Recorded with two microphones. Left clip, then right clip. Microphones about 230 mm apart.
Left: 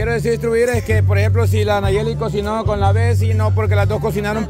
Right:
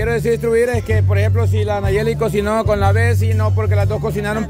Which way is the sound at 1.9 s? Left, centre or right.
Centre.